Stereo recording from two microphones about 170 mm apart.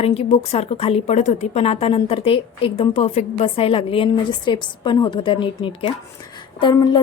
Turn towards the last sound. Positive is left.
turn(degrees=25)  # may be behind; listen again after turning